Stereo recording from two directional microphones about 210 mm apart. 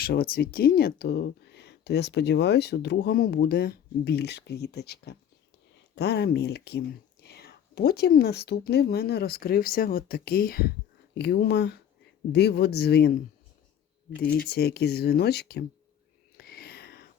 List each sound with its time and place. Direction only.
0.0 s speech: 45° left (ahead or behind)
14.3 s speech: 50° left (ahead or behind)
16.4 s a sound: 45° left (ahead or behind)